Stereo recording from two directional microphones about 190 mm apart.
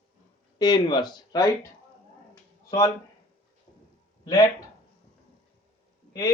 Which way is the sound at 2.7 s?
15° left (ahead or behind).